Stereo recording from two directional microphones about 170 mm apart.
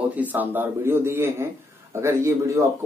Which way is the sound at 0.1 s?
10° right (ahead or behind).